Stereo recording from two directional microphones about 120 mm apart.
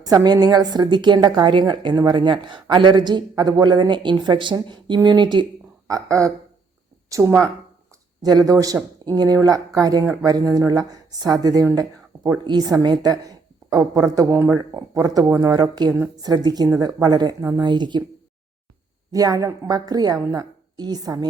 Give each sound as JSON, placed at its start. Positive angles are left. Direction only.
{"t": 0.0, "sound": "a woman's voice", "side_deg": -30}
{"t": 5.9, "sound": "a woman's voice", "side_deg": -25}
{"t": 19.1, "sound": "a woman's voice", "side_deg": -30}